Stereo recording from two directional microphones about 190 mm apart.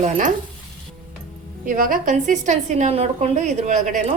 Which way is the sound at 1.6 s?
45° right (ahead or behind).